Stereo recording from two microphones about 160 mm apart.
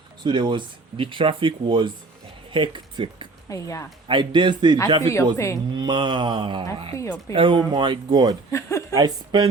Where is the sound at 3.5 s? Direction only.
20° left (ahead or behind).